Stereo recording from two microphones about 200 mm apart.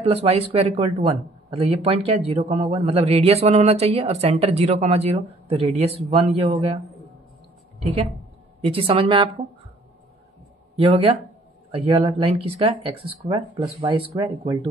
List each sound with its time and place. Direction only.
0.0 s a man's voice: 30° right (ahead or behind)
8.6 s speech: 30° right (ahead or behind)
10.8 s speech: 30° right (ahead or behind)